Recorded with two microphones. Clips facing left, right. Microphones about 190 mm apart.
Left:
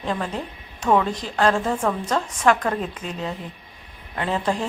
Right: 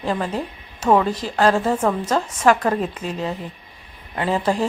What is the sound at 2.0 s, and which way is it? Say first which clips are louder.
A woman's voice: right 2 dB; 5° right (ahead or behind).